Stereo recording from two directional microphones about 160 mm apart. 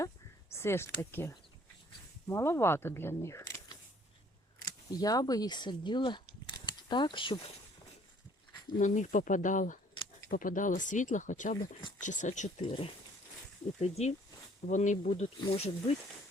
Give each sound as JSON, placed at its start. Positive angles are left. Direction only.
{"t": 0.5, "sound": "speech", "side_deg": 15}
{"t": 4.9, "sound": "speech", "side_deg": 25}
{"t": 8.8, "sound": "speech", "side_deg": 55}
{"t": 12.6, "sound": "speech", "side_deg": 35}
{"t": 15.1, "sound": "speech", "side_deg": 40}